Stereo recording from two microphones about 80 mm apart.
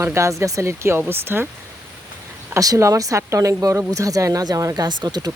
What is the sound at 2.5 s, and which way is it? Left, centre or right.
Speech, right.